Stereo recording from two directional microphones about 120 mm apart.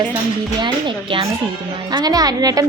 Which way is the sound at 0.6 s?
40° right (ahead or behind).